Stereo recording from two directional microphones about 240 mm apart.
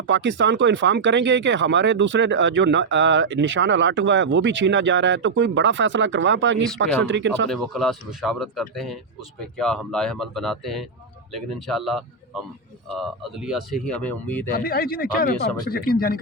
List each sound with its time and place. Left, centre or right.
0.1 s speech: right
7.5 s speech: centre
14.5 s speech: left